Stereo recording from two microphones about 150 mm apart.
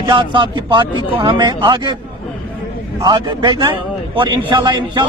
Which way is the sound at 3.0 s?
30° right (ahead or behind).